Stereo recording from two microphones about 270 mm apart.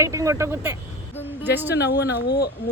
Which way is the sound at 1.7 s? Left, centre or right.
Left.